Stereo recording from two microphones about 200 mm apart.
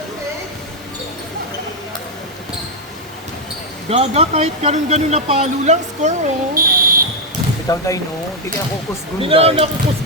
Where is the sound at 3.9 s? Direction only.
30° right (ahead or behind).